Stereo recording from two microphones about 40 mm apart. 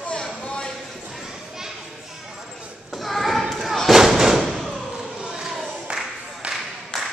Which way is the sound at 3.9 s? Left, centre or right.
Centre.